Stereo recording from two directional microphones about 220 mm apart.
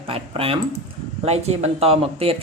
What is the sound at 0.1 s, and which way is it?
Speech, 25° right (ahead or behind).